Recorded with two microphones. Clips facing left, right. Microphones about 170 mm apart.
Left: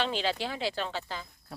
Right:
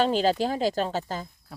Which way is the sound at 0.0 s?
40° right (ahead or behind).